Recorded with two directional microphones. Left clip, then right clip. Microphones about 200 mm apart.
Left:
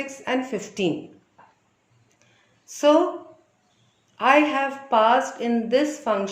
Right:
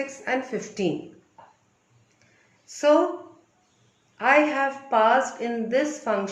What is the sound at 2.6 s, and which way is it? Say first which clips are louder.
Speech: left 1 dB; 35° left (ahead or behind).